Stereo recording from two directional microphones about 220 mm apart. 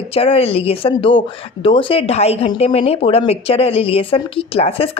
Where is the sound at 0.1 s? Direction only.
25° left (ahead or behind).